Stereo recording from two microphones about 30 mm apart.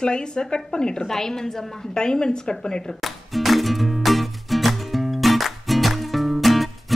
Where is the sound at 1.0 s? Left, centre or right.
Centre.